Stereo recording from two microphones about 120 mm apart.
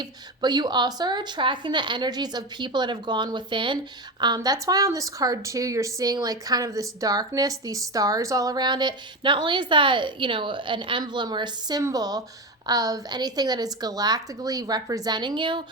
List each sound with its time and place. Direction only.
0.0 s speech: 35° right (ahead or behind)
4.4 s speech: 25° right (ahead or behind); by 15.6 s 40° right (ahead or behind)